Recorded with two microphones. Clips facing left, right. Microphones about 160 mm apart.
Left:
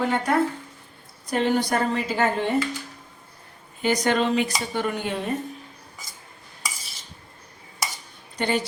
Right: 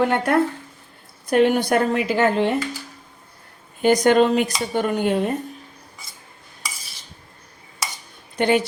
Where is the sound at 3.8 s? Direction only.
50° right (ahead or behind).